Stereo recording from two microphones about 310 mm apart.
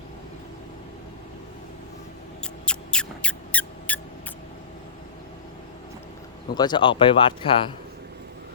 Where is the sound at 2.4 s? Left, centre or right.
Centre.